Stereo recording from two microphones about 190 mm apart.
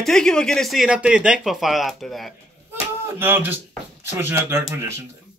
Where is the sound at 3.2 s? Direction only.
10° right (ahead or behind).